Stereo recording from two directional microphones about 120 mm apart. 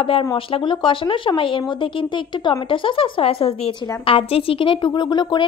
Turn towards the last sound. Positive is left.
turn(degrees=40)  # may be behind; listen again after turning